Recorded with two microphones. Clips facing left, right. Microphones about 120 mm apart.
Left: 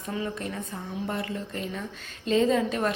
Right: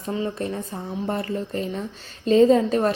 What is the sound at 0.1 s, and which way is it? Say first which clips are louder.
A woman's voice: right 5 dB; 30° right (ahead or behind).